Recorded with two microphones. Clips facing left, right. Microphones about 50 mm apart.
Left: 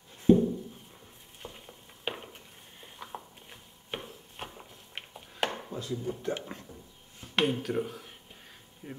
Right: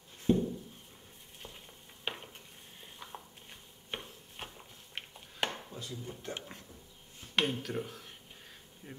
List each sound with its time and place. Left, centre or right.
0.2 s a sound: centre
1.4 s stir: centre
3.4 s a sound: centre
5.5 s chopping: left
5.9 s speech: centre
8.8 s speech: centre